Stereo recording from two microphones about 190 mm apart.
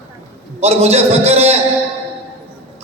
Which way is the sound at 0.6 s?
35° right (ahead or behind).